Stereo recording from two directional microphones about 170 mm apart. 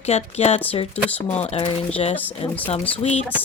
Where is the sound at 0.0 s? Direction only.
40° left (ahead or behind).